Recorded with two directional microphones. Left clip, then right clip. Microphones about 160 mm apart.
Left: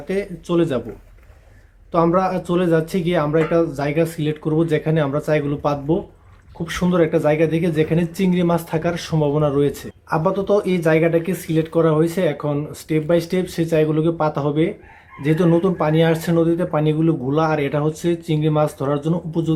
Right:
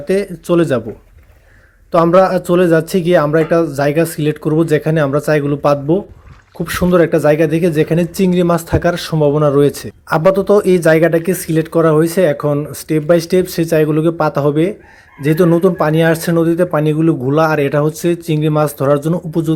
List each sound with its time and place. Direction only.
0.1 s speech: 40° right (ahead or behind)
1.9 s speech: 40° right (ahead or behind)